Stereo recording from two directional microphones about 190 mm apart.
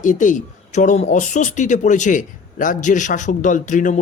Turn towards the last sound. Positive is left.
turn(degrees=40)  # may be behind; listen again after turning